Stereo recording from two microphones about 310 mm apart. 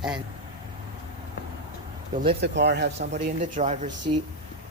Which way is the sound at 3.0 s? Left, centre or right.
Right.